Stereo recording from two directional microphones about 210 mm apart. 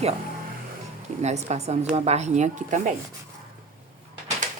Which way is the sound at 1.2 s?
30° right (ahead or behind).